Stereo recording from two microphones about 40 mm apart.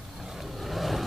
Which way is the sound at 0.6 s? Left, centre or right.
Centre.